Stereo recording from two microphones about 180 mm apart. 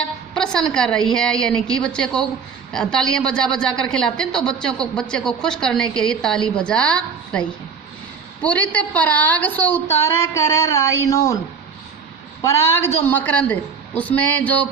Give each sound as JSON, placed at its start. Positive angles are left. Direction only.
{"t": 0.0, "sound": "a woman's voice", "side_deg": 5}
{"t": 12.4, "sound": "a woman's voice", "side_deg": 15}